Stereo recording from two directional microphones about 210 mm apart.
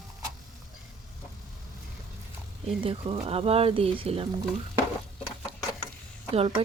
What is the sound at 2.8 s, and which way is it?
Speech, 25° right (ahead or behind).